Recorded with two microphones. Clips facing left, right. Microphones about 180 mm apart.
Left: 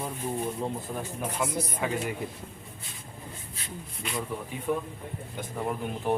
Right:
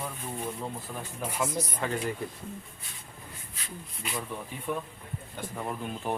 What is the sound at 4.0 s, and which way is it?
Speech, 5° right (ahead or behind).